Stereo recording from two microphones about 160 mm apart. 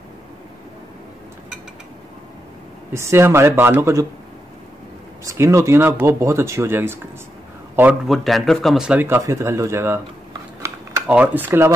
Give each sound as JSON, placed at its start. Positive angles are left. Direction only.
{"t": 2.9, "sound": "speech", "side_deg": -15}
{"t": 5.2, "sound": "speech", "side_deg": -20}
{"t": 8.1, "sound": "speech", "side_deg": 0}
{"t": 10.6, "sound": "typing", "side_deg": -20}
{"t": 11.1, "sound": "speech", "side_deg": -10}